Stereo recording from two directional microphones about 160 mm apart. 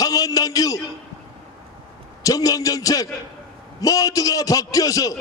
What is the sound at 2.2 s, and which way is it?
A man's voice, 20° left (ahead or behind).